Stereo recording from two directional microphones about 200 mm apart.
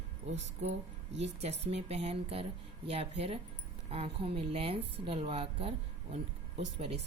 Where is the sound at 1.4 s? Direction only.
30° right (ahead or behind).